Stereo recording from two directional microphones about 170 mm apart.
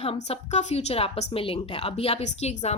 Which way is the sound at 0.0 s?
40° left (ahead or behind).